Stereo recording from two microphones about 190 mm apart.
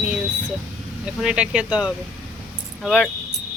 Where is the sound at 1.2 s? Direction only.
5° right (ahead or behind).